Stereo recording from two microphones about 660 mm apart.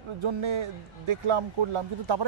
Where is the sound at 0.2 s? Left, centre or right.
Right.